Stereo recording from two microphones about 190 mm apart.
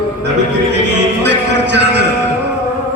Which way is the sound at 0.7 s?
65° right (ahead or behind).